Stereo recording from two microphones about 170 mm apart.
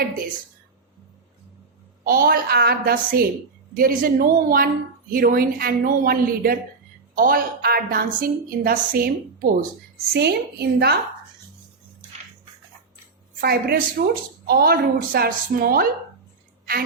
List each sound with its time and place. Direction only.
2.0 s a woman's voice: 60° right (ahead or behind)
10.1 s a woman's voice: 70° right (ahead or behind)
13.4 s a woman's voice: 60° right (ahead or behind)